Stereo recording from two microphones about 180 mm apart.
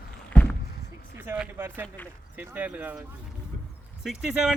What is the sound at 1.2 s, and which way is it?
Speech, 10° right (ahead or behind).